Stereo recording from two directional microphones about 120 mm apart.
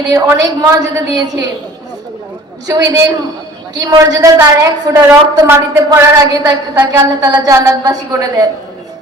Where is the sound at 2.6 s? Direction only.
30° right (ahead or behind).